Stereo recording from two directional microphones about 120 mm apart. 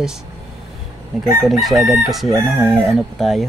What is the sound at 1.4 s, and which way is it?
Speech, centre (ahead or behind).